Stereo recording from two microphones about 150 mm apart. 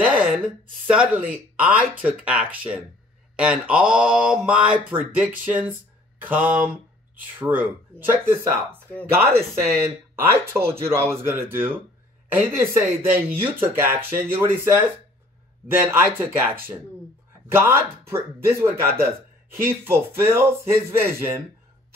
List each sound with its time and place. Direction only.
0.0 s a sound: 10° right (ahead or behind)
0.8 s speech: 10° right (ahead or behind)
9.6 s speech: 15° right (ahead or behind)